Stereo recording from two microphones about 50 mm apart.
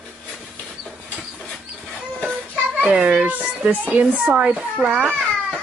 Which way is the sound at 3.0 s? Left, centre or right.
Right.